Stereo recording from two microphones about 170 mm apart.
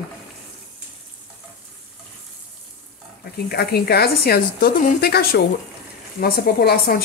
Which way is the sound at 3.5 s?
70° left (ahead or behind).